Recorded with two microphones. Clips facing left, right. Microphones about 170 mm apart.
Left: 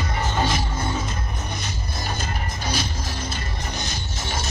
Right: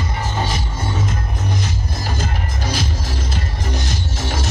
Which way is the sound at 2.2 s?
90° right.